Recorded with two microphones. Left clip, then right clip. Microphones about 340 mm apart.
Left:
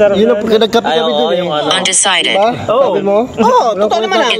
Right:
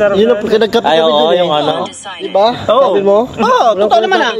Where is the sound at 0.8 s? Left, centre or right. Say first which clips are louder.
Right 3 dB; right.